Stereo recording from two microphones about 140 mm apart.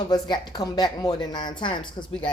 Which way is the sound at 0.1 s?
30° left (ahead or behind).